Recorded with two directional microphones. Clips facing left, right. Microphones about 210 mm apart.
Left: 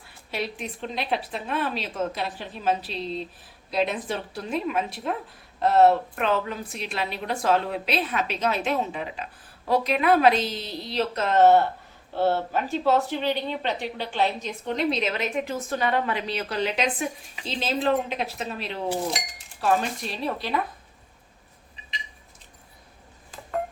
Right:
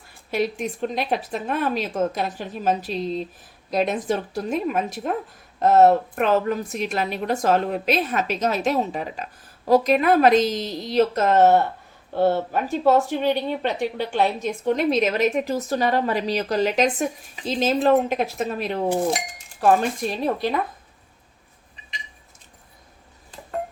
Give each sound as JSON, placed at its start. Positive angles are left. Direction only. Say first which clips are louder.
{"t": 0.3, "sound": "speech", "louder": "right 7 dB", "side_deg": -45}